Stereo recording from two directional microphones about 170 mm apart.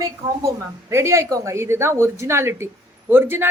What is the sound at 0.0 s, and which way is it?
A woman's voice, 15° right (ahead or behind).